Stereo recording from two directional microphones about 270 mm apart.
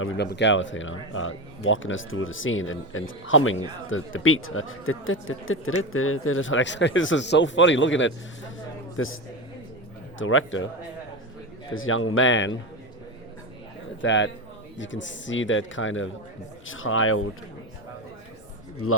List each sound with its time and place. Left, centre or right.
0.0 s speech: left
10.2 s speech: left
11.7 s speech: left
14.0 s speech: left
18.8 s speech: left